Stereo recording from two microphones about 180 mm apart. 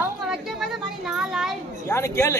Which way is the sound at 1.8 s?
15° left (ahead or behind).